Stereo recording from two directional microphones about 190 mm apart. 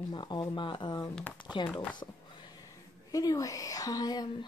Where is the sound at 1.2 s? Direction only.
5° left (ahead or behind).